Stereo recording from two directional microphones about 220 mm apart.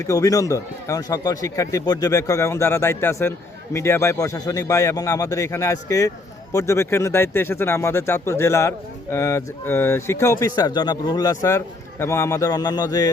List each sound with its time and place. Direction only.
0.1 s a man's voice: 15° left (ahead or behind)